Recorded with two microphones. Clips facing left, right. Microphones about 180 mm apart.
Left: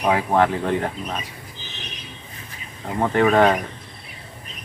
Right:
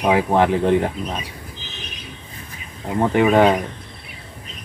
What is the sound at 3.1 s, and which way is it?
Speech, 15° right (ahead or behind).